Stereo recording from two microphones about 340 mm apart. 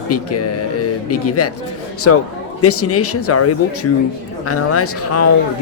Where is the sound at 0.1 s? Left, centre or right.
Left.